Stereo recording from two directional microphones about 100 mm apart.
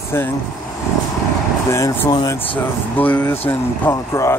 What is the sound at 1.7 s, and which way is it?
Speech, 25° left (ahead or behind).